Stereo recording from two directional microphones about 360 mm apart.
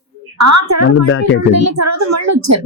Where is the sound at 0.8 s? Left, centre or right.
Left.